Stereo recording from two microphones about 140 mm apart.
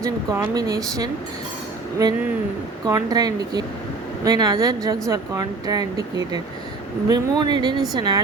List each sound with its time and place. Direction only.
0.0 s speech: 25° right (ahead or behind)
2.0 s speech: 25° right (ahead or behind)